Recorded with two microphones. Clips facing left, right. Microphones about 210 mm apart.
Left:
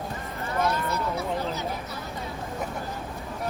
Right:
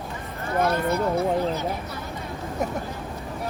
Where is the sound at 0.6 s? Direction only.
55° right (ahead or behind).